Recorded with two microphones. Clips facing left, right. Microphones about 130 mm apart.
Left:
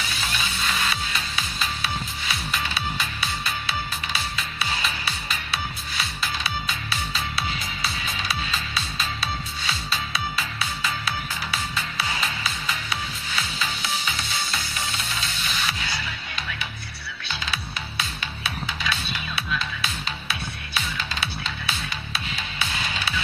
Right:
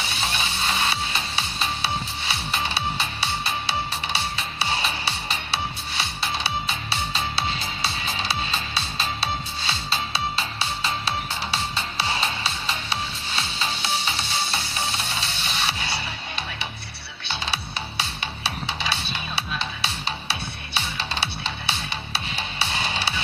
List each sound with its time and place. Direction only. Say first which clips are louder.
0.0 s music: right 2 dB; 30° right (ahead or behind)